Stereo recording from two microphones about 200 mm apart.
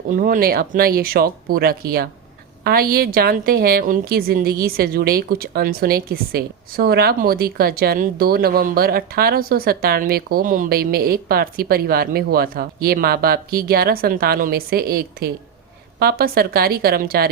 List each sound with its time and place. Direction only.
0.1 s a woman's voice: 45° right (ahead or behind)